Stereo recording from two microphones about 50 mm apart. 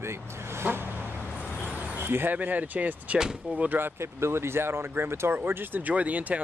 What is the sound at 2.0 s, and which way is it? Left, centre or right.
Speech, right.